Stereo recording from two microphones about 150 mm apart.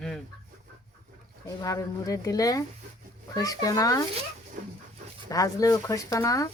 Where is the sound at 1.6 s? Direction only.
20° left (ahead or behind).